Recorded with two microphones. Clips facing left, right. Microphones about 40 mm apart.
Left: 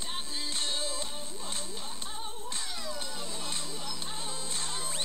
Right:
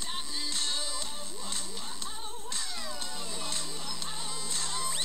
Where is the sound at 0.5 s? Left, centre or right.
Left.